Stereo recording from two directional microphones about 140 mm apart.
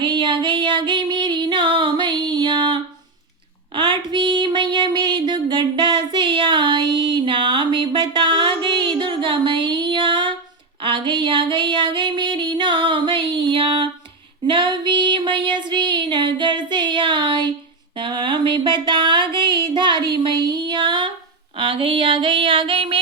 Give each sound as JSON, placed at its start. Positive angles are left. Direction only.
{"t": 0.0, "sound": "female singing", "side_deg": -35}
{"t": 3.8, "sound": "a sound", "side_deg": -35}
{"t": 8.1, "sound": "music", "side_deg": -35}
{"t": 14.4, "sound": "female singing", "side_deg": -35}
{"t": 17.9, "sound": "music", "side_deg": -35}
{"t": 21.6, "sound": "female singing", "side_deg": -40}